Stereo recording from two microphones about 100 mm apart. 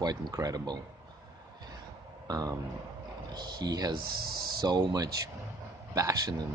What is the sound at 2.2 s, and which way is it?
A man's voice, 40° right (ahead or behind).